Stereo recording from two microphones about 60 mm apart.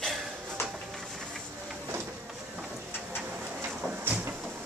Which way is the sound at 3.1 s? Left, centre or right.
Right.